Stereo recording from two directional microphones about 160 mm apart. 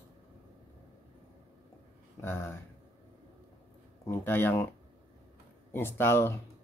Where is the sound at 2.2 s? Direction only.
15° left (ahead or behind).